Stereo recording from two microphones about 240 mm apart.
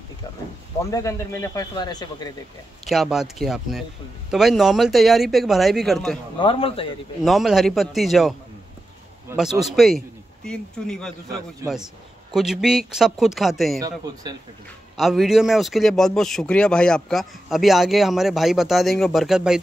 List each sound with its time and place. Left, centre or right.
0.8 s speech: centre
2.9 s speech: centre
6.3 s a man's voice: left
7.2 s speech: centre
13.7 s a man's voice: centre
15.0 s speech: centre